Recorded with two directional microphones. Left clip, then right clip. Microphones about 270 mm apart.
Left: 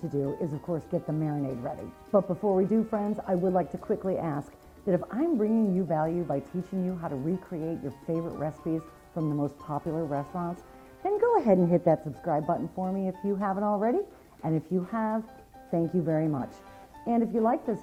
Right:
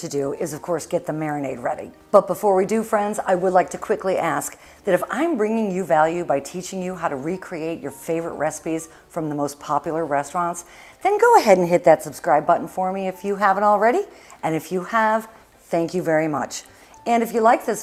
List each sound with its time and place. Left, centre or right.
0.4 s a woman's voice: centre